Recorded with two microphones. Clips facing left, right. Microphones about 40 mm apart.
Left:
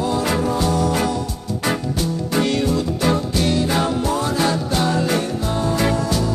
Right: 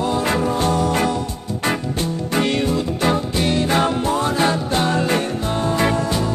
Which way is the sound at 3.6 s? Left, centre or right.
Right.